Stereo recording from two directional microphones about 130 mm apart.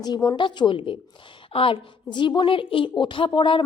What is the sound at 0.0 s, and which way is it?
A woman's voice, 30° left (ahead or behind).